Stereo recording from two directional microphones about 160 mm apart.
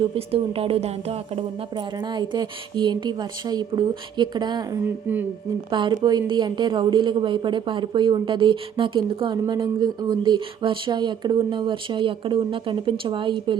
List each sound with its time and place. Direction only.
0.0 s speech: 35° right (ahead or behind)